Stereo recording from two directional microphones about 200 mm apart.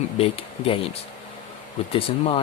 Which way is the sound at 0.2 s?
30° left (ahead or behind).